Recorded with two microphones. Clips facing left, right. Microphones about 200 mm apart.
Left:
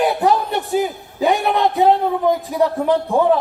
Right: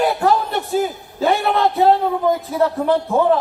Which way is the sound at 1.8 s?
Centre (ahead or behind).